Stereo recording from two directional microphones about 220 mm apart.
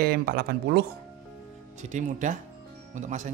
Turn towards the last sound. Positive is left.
turn(degrees=-35)  # may be behind; listen again after turning